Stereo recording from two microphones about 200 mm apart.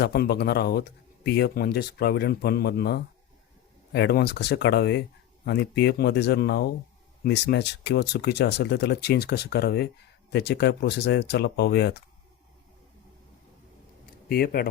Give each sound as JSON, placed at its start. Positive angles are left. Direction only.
{"t": 0.0, "sound": "speech", "side_deg": 50}
{"t": 14.3, "sound": "speech", "side_deg": 50}